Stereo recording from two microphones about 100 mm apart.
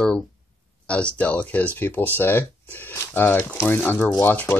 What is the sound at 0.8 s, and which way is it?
Speech, 10° left (ahead or behind).